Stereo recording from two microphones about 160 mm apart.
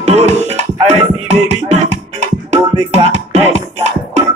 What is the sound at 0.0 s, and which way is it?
Music, 40° right (ahead or behind).